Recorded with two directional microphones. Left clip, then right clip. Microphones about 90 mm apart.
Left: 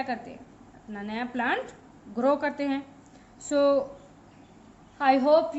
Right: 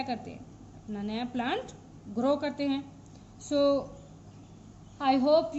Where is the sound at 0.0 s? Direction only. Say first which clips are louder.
Left 3 dB; 20° left (ahead or behind); by 3.8 s 45° left (ahead or behind).